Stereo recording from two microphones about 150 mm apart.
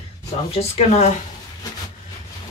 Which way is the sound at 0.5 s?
45° left (ahead or behind).